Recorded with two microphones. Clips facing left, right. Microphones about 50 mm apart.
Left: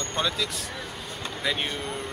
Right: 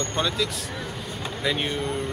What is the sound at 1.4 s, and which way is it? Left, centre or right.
Speech, centre.